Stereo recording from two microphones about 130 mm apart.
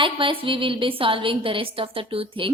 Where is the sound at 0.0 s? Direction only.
40° right (ahead or behind).